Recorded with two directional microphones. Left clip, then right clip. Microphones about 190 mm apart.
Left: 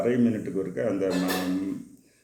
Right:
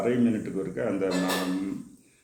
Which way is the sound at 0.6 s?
10° left (ahead or behind).